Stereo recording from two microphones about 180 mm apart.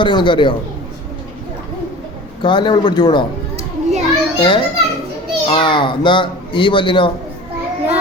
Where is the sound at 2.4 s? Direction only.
25° left (ahead or behind).